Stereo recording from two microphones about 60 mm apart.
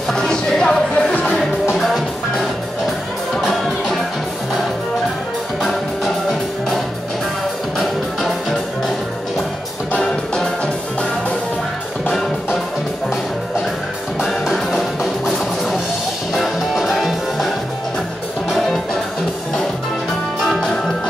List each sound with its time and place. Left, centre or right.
0.1 s music: centre
1.8 s music: centre
3.3 s music: centre
5.6 s music: centre
7.8 s music: centre
9.9 s music: centre
14.2 s music: centre
18.5 s music: centre